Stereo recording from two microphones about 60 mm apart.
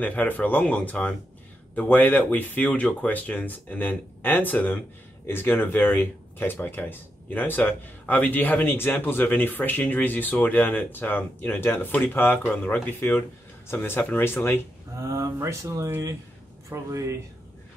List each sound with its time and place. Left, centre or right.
0.0 s speech: left
13.0 s speech: left
15.0 s speech: right